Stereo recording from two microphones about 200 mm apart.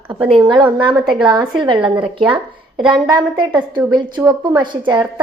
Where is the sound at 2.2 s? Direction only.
5° right (ahead or behind).